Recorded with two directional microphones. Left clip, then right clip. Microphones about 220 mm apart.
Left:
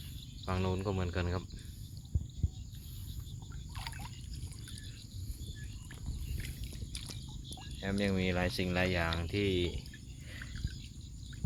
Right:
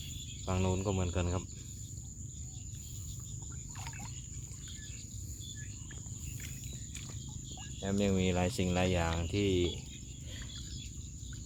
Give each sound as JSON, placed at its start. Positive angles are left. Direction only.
{"t": 0.4, "sound": "speech", "side_deg": -5}
{"t": 3.8, "sound": "a sound", "side_deg": 45}
{"t": 7.8, "sound": "speech", "side_deg": -5}